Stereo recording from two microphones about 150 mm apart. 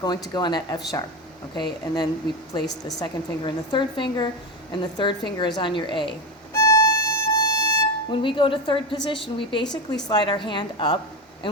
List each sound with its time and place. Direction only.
0.0 s a woman's voice: 30° left (ahead or behind)
5.4 s violin: 30° left (ahead or behind)
9.0 s a woman's voice: 35° left (ahead or behind)